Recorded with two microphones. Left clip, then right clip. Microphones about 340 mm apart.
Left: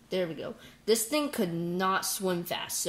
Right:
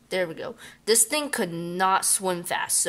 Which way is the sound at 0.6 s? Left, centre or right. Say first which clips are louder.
Right 4 dB; right.